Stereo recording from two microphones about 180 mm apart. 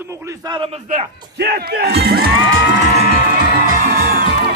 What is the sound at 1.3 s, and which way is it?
Speech, 60° right (ahead or behind).